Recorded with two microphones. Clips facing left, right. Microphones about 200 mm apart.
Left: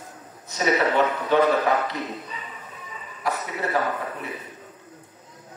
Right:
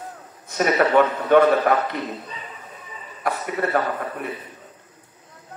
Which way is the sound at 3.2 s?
55° right (ahead or behind).